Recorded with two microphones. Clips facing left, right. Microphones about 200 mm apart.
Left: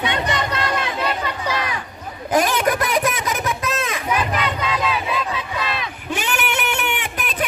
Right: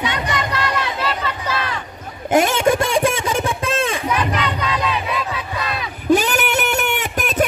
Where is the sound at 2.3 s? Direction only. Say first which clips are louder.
Right 3 dB; 25° right (ahead or behind).